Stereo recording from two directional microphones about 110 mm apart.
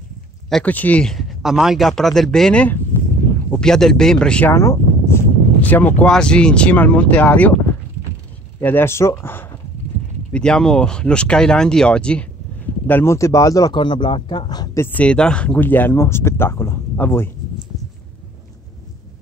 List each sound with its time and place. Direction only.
0.7 s speech: 15° left (ahead or behind)
1.1 s speech: 5° right (ahead or behind)
4.6 s a sound: 25° left (ahead or behind)
5.6 s speech: 15° left (ahead or behind)
8.5 s speech: 20° left (ahead or behind)
10.3 s speech: 5° left (ahead or behind)
12.8 s speech: 20° left (ahead or behind)
13.7 s speech: 45° left (ahead or behind)
14.8 s speech: 15° left (ahead or behind)